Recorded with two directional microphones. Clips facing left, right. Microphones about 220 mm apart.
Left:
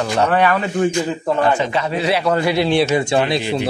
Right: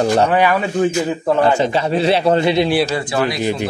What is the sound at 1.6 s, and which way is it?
Speech, 30° right (ahead or behind).